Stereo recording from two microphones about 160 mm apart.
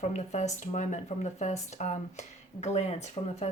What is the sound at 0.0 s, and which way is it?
Speech, 45° left (ahead or behind).